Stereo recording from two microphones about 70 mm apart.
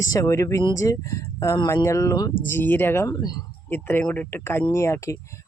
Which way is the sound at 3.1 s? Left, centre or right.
Left.